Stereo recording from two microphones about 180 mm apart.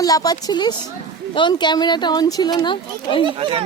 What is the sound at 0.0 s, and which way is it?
Speech, 20° left (ahead or behind).